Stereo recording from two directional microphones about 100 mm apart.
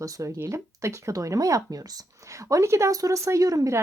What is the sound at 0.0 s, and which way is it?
Speech, 35° right (ahead or behind).